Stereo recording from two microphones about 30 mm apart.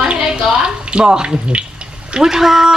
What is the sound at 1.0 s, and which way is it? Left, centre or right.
Speech, right.